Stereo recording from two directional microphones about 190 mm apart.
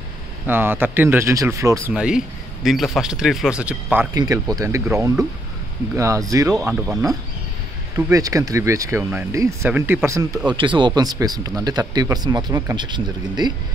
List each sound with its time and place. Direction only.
0.5 s speech: 10° right (ahead or behind)
4.1 s speech: 20° right (ahead or behind)
8.1 s speech: 15° right (ahead or behind)
10.6 s speech: 25° right (ahead or behind)